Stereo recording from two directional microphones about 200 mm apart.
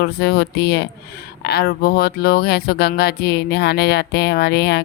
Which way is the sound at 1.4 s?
55° left (ahead or behind).